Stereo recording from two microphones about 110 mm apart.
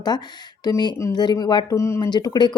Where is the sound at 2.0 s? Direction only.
40° left (ahead or behind).